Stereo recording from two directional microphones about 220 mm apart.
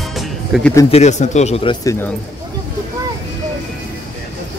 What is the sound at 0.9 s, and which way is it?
Speech, 30° left (ahead or behind).